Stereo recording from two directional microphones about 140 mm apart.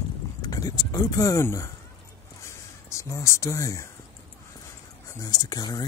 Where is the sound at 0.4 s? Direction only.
25° left (ahead or behind).